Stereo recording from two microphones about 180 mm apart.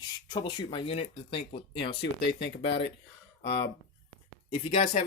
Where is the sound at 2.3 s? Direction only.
70° left (ahead or behind).